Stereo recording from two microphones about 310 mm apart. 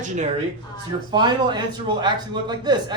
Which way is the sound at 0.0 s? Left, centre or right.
Right.